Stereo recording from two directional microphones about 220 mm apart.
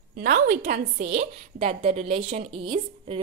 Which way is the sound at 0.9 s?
30° right (ahead or behind).